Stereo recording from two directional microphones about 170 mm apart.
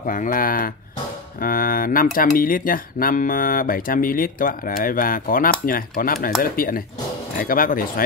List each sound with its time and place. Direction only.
0.0 s speech: 55° left (ahead or behind)